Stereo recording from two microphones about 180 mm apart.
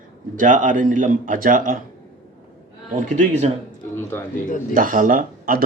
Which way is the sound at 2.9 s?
40° right (ahead or behind).